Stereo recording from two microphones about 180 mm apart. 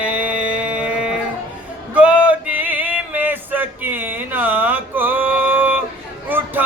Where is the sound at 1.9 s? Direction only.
5° right (ahead or behind).